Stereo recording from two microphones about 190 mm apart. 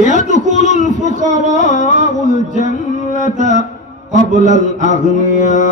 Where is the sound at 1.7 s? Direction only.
40° left (ahead or behind).